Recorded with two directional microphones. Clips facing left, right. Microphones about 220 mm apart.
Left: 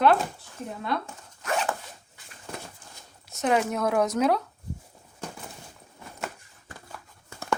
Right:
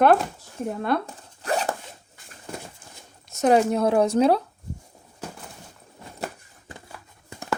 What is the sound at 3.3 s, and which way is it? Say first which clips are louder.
Speech: right 6 dB; 40° right (ahead or behind).